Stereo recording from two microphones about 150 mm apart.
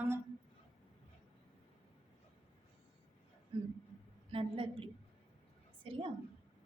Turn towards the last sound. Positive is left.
turn(degrees=-35)  # may be behind; listen again after turning